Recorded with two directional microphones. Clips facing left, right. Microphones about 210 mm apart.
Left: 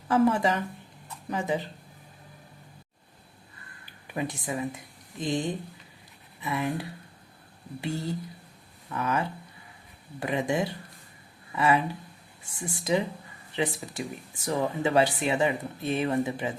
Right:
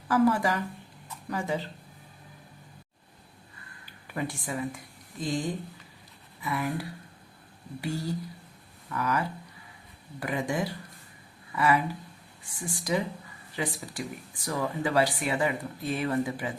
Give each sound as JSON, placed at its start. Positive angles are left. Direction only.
{"t": 0.1, "sound": "speech", "side_deg": 25}
{"t": 4.0, "sound": "speech", "side_deg": 15}